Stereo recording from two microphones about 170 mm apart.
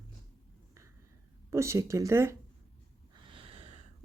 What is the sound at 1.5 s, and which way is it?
Speech, 15° right (ahead or behind).